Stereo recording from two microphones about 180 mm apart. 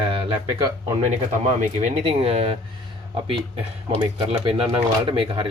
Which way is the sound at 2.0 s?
35° right (ahead or behind).